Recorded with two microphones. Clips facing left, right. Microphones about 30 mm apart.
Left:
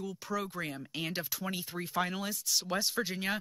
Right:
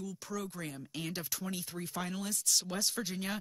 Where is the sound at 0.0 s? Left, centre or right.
Left.